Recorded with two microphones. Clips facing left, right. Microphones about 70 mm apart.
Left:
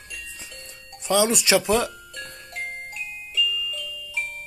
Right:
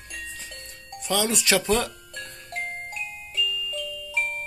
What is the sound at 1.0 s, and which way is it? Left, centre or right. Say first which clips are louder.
Speech: left 4 dB; centre.